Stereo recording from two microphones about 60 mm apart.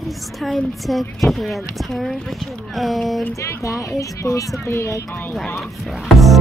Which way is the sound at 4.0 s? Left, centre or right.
Left.